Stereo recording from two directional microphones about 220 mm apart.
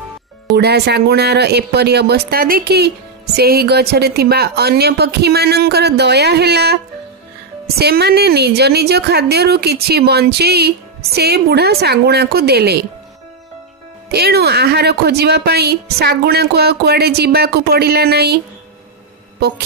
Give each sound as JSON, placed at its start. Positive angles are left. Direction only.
{"t": 0.5, "sound": "a woman's voice", "side_deg": -45}
{"t": 7.8, "sound": "a woman's voice", "side_deg": -45}
{"t": 14.1, "sound": "a woman's voice", "side_deg": -45}